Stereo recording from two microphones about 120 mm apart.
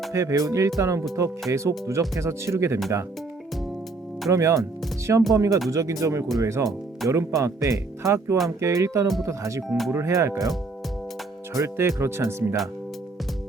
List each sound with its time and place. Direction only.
0.1 s speech: 25° right (ahead or behind)
4.3 s speech: 25° right (ahead or behind)
9.6 s speech: centre (ahead or behind)
9.9 s speech: 25° right (ahead or behind)
11.5 s speech: 25° right (ahead or behind)